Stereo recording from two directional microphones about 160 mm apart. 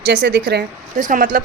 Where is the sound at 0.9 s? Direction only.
55° right (ahead or behind).